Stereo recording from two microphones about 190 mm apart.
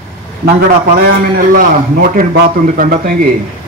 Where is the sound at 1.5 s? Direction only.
50° right (ahead or behind).